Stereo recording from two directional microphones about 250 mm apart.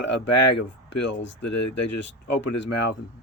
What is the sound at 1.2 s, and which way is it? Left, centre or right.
Speech, left.